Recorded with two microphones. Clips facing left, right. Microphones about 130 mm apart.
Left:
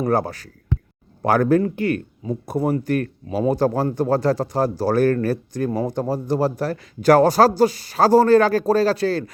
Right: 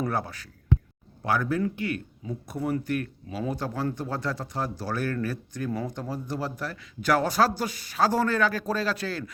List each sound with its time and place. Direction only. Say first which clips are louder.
0.0 s speech: left 9 dB; 40° left (ahead or behind)
1.2 s speech: left 9 dB; 50° left (ahead or behind); by 9.3 s 35° left (ahead or behind)